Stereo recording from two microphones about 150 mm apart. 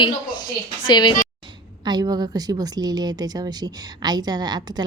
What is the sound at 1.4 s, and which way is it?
Speech, 30° right (ahead or behind).